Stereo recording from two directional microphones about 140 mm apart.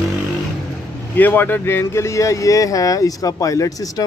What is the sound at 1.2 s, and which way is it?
Speech, 15° left (ahead or behind).